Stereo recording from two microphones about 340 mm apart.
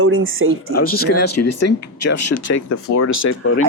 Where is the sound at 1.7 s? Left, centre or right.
Left.